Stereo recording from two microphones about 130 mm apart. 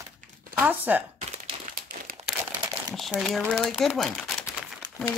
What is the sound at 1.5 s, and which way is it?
Crumpling, 45° right (ahead or behind).